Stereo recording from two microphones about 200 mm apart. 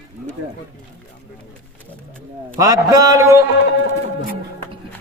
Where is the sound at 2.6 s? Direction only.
15° right (ahead or behind).